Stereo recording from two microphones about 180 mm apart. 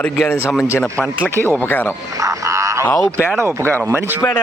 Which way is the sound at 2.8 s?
10° left (ahead or behind).